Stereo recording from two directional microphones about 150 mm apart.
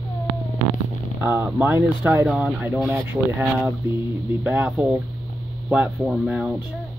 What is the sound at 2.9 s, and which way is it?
Speech, 15° right (ahead or behind).